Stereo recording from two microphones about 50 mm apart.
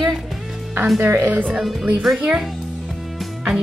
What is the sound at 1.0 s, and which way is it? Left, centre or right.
Speech, right.